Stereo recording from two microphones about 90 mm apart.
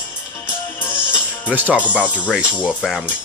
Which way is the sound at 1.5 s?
15° right (ahead or behind).